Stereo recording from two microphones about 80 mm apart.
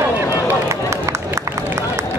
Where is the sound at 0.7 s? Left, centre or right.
Right.